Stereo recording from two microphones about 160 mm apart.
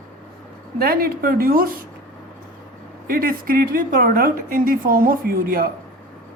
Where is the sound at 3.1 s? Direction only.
65° right (ahead or behind).